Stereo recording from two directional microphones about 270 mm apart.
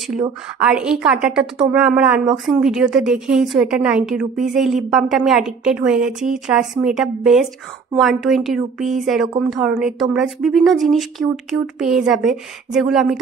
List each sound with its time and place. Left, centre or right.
0.2 s a woman's voice: centre